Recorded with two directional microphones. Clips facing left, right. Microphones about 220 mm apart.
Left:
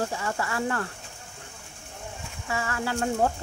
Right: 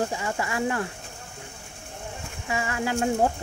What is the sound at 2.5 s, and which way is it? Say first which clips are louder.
Speech: right 2 dB; 15° right (ahead or behind).